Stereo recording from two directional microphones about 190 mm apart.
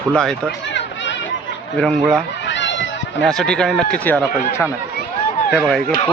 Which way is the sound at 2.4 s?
70° left (ahead or behind).